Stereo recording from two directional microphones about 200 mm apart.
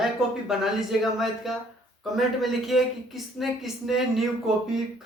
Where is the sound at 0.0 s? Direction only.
Centre (ahead or behind).